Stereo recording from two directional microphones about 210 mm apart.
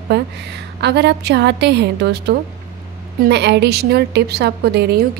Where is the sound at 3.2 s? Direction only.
55° right (ahead or behind).